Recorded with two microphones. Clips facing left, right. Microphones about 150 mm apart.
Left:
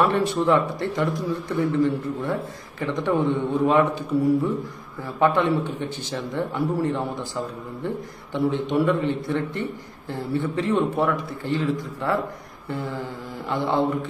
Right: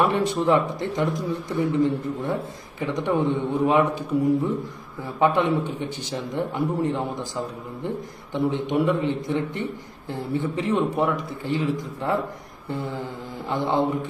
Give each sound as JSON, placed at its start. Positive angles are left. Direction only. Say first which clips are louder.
{"t": 0.0, "sound": "a man's voice", "louder": "left 1 dB", "side_deg": -15}
{"t": 5.0, "sound": "a man's voice", "louder": "even", "side_deg": -15}